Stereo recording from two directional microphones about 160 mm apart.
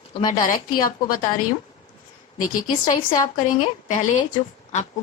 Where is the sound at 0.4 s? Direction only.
60° left (ahead or behind).